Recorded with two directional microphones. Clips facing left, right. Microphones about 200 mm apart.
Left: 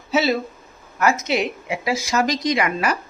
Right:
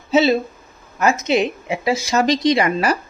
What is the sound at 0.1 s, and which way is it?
Speech, 25° right (ahead or behind).